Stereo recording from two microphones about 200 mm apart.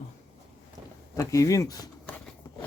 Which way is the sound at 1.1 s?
15° left (ahead or behind).